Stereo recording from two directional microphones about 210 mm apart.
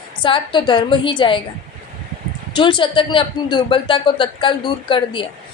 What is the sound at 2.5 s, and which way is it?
Speech, 25° left (ahead or behind).